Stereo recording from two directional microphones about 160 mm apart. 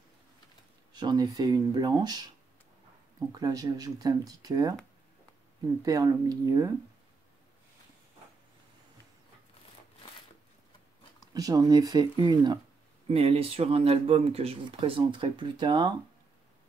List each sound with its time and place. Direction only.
0.9 s speech: 25° right (ahead or behind)
5.8 s speech: 20° right (ahead or behind)
11.3 s speech: 25° right (ahead or behind)
13.1 s speech: 40° right (ahead or behind)